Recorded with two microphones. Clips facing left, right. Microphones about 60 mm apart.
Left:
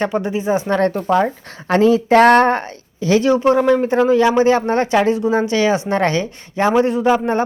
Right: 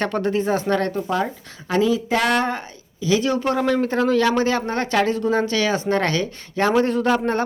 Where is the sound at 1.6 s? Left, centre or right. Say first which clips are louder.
Left 6 dB; left.